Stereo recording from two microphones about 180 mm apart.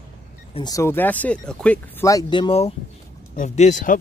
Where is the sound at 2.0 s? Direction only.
20° left (ahead or behind).